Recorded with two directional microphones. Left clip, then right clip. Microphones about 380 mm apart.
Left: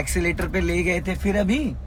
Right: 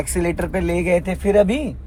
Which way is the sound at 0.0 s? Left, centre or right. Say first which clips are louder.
Right 3 dB; centre.